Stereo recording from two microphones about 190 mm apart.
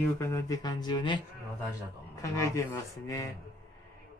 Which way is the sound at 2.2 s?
15° left (ahead or behind).